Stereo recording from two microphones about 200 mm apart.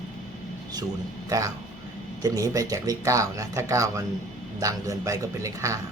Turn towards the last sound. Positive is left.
turn(degrees=-15)  # may be behind; listen again after turning